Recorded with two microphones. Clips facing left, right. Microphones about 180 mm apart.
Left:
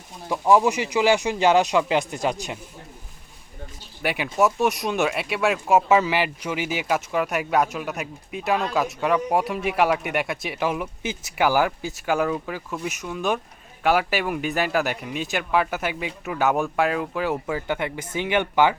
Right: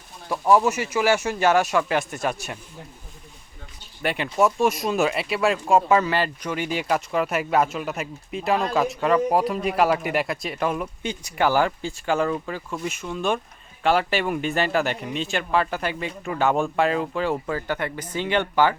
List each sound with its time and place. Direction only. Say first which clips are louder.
0.3 s speech: left 1 dB; 15° left (ahead or behind)
4.0 s speech: even; 10° left (ahead or behind)